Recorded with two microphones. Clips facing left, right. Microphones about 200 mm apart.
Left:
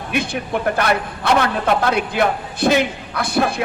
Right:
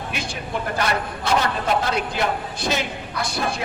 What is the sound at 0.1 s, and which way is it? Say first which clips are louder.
A man's voice: left 10 dB; 55° left (ahead or behind).